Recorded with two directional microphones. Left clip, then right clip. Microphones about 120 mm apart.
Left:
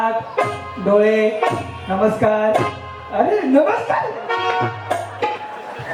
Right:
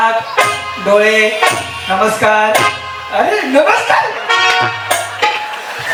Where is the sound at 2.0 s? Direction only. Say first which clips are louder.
Right 4 dB; 30° right (ahead or behind).